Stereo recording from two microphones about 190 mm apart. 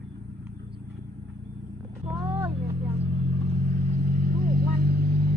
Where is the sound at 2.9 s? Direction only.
35° right (ahead or behind).